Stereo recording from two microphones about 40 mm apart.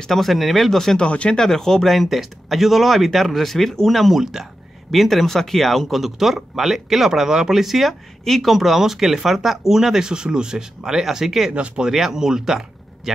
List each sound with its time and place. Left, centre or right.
0.0 s speech: centre
0.7 s speech: centre
1.0 s speech: left
1.4 s speech: centre
1.9 s speech: centre
4.2 s speech: centre
4.9 s speech: centre
11.5 s speech: right
11.9 s speech: centre